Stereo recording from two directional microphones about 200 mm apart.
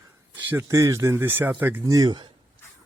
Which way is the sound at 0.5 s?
15° right (ahead or behind).